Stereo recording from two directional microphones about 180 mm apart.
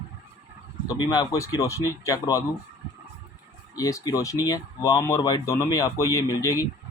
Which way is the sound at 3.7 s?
20° left (ahead or behind).